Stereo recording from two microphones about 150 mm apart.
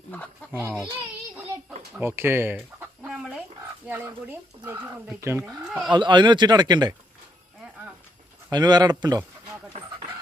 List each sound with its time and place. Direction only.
0.1 s speech: 10° left (ahead or behind)
0.6 s speech: 10° right (ahead or behind)
2.0 s speech: 15° right (ahead or behind)
3.0 s chicken: 5° right (ahead or behind)
3.8 s speech: 15° right (ahead or behind)
5.6 s speech: 5° right (ahead or behind)
5.9 s speech: 30° right (ahead or behind)
8.4 s speech: 25° right (ahead or behind)